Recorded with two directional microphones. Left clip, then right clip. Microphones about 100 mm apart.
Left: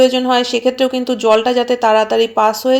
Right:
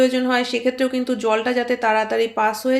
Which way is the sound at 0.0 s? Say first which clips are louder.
Left 6 dB; 30° left (ahead or behind).